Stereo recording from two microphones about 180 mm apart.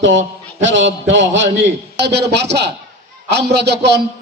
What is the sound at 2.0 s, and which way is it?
A man's voice, 70° right (ahead or behind).